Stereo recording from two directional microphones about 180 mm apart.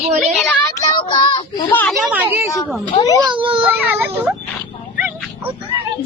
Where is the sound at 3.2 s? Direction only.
25° right (ahead or behind).